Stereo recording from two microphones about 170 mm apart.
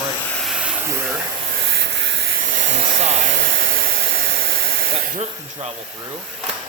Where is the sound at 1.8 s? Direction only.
90° right.